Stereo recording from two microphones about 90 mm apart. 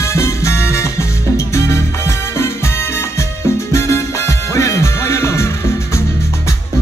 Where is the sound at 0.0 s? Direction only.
35° left (ahead or behind).